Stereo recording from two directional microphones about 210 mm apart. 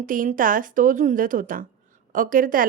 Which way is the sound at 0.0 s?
40° right (ahead or behind).